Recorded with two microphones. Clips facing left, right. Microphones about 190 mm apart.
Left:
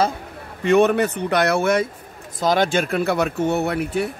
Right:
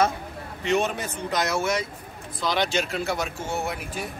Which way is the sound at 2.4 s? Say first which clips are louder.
Left 6 dB; 45° left (ahead or behind).